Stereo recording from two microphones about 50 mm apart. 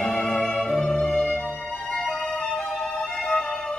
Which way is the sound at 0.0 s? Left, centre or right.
Centre.